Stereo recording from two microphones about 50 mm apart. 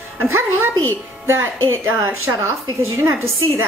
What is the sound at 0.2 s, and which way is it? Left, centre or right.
A woman's voice, right.